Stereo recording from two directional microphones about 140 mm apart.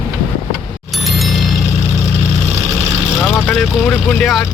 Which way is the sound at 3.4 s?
5° left (ahead or behind).